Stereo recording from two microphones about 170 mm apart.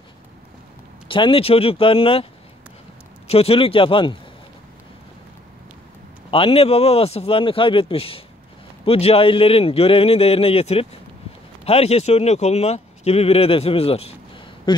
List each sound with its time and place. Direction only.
1.0 s a man's voice: 30° left (ahead or behind)
3.3 s a man's voice: 35° left (ahead or behind)
6.3 s a man's voice: 35° left (ahead or behind)